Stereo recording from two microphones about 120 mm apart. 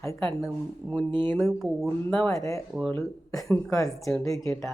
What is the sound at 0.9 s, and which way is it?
Speech, 40° right (ahead or behind).